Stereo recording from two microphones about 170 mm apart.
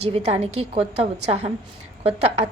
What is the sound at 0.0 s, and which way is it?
A woman's voice, 40° right (ahead or behind).